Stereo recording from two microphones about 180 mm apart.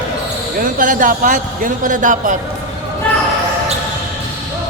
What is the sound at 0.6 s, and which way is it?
A man's voice, 45° right (ahead or behind).